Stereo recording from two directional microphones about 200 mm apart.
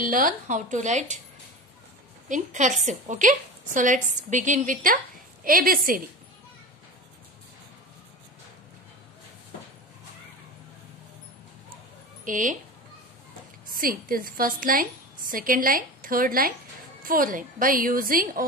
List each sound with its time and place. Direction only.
0.0 s a woman's voice: 40° right (ahead or behind)
2.2 s a woman's voice: 40° right (ahead or behind)
12.3 s a woman's voice: 40° right (ahead or behind)
13.7 s a woman's voice: 45° right (ahead or behind)